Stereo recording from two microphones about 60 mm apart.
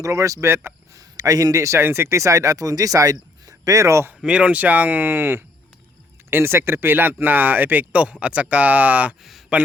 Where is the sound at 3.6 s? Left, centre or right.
Right.